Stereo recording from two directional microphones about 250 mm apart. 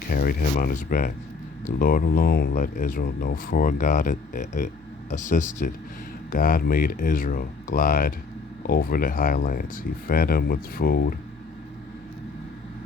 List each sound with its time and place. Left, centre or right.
0.1 s speech: left